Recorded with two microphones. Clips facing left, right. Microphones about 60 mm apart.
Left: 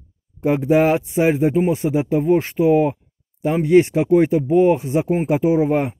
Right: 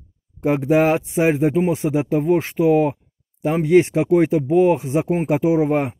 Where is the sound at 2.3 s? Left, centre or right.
Right.